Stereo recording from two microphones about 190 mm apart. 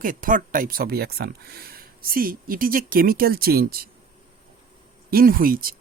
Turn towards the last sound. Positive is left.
turn(degrees=-50)  # may be behind; listen again after turning